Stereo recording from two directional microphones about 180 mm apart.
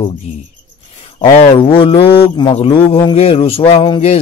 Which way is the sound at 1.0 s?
30° left (ahead or behind).